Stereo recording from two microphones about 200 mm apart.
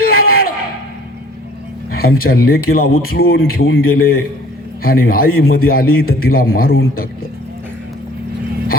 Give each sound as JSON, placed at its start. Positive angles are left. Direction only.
{"t": 0.0, "sound": "bellow", "side_deg": 50}
{"t": 2.0, "sound": "a man's voice", "side_deg": 50}